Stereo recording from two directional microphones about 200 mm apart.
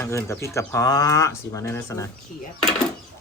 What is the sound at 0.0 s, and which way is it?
Speech, 15° left (ahead or behind).